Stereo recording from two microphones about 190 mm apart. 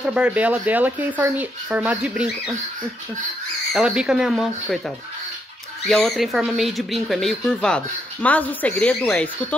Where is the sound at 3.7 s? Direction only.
5° right (ahead or behind).